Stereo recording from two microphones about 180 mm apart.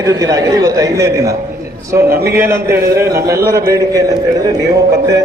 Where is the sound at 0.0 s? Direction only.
20° right (ahead or behind).